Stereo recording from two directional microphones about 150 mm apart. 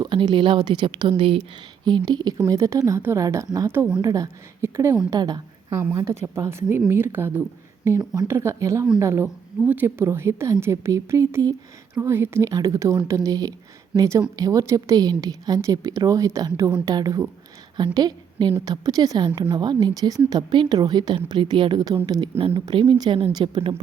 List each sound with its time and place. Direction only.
0.0 s a woman's voice: 30° right (ahead or behind)
22.4 s speech: 40° right (ahead or behind)